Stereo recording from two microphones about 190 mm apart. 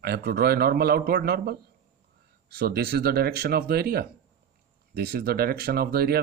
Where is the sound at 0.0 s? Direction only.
55° right (ahead or behind).